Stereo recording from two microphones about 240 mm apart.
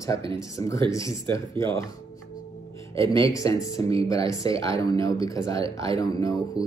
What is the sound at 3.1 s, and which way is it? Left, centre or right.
Speech, centre.